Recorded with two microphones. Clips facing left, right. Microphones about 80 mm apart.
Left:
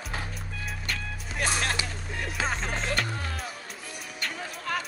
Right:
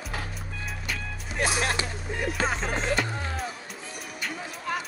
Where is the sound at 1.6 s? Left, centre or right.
Right.